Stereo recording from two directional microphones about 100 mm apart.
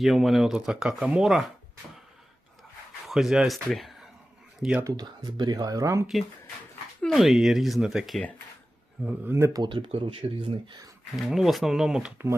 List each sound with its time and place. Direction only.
0.0 s speech: centre (ahead or behind)
3.1 s speech: 5° right (ahead or behind)
4.9 s speech: 45° right (ahead or behind)
7.0 s speech: centre (ahead or behind)
9.0 s speech: 20° right (ahead or behind)
9.6 s speech: 55° right (ahead or behind)
9.9 s speech: 90° right
11.2 s speech: centre (ahead or behind)